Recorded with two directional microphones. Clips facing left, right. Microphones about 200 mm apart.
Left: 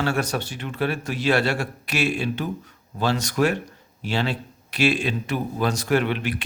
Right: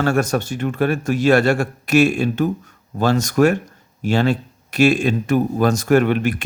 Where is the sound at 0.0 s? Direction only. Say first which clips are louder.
Right 6 dB; 45° right (ahead or behind).